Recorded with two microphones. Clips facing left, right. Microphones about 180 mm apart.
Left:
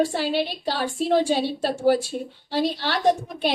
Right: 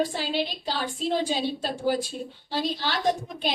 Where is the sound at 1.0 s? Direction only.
70° left (ahead or behind).